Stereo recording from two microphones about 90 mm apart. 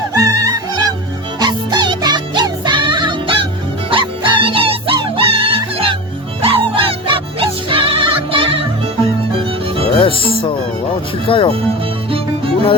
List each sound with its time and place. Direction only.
0.1 s music: 40° right (ahead or behind)
1.4 s music: 55° right (ahead or behind); by 6.0 s 80° right
6.4 s music: 90° right
10.0 s music: 70° left (ahead or behind)
11.3 s speech: 85° left